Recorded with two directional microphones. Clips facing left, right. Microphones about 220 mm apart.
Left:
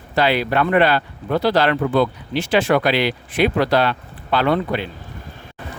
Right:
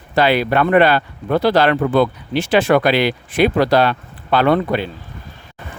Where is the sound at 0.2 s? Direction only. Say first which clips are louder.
Right 3 dB; 55° right (ahead or behind).